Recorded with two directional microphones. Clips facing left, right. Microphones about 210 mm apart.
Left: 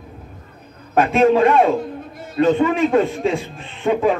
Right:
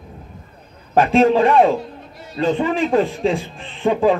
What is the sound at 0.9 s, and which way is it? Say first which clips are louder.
A man's voice: even; 30° right (ahead or behind).